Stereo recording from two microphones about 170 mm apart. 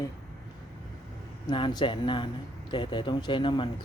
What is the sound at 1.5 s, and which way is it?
Speech, 30° left (ahead or behind).